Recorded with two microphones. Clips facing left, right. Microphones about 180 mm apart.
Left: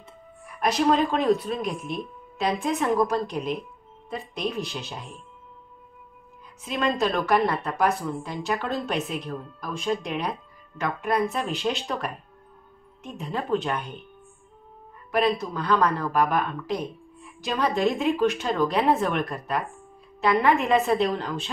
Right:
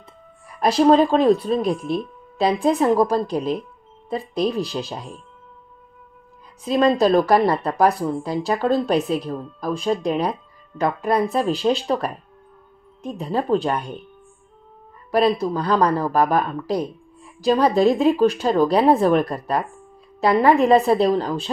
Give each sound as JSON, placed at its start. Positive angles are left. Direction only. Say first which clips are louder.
{"t": 0.6, "sound": "speech", "louder": "right 7 dB", "side_deg": -30}
{"t": 6.6, "sound": "speech", "louder": "right 8 dB", "side_deg": -35}
{"t": 15.0, "sound": "speech", "louder": "right 5 dB", "side_deg": -35}